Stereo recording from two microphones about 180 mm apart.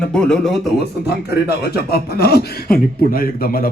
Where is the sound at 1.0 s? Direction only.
60° left (ahead or behind).